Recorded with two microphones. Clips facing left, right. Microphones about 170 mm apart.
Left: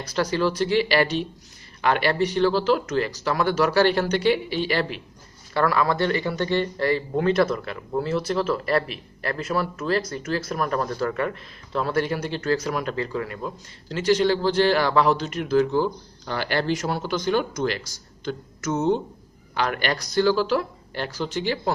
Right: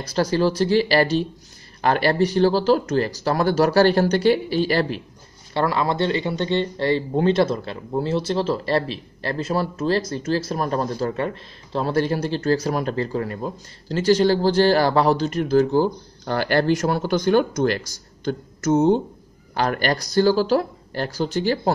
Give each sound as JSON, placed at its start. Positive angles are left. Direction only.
{"t": 0.0, "sound": "speech", "side_deg": -35}
{"t": 5.5, "sound": "speech", "side_deg": -25}